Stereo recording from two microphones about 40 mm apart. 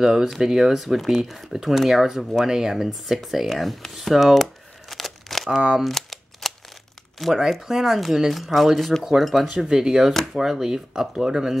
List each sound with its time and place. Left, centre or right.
0.0 s speech: centre
4.4 s crumpling: centre
5.9 s cap gun: centre
7.2 s speech: centre
9.5 s speech: centre